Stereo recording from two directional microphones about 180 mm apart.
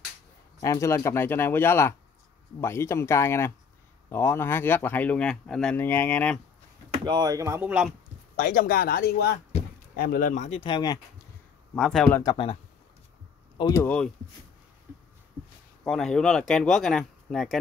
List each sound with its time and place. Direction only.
0.6 s speech: 15° left (ahead or behind)
6.9 s speech: 25° right (ahead or behind); by 7.9 s 10° right (ahead or behind)
8.4 s speech: 60° left (ahead or behind); by 11.0 s 25° left (ahead or behind)
11.7 s speech: 5° left (ahead or behind)
12.2 s speech: 20° left (ahead or behind)
13.6 s speech: 20° left (ahead or behind)
13.8 s speech: 5° left (ahead or behind)
15.8 s speech: 5° left (ahead or behind)